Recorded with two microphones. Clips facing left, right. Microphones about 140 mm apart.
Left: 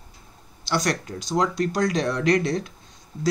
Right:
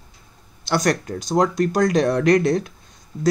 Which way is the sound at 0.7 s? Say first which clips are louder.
Right 4 dB; 50° right (ahead or behind).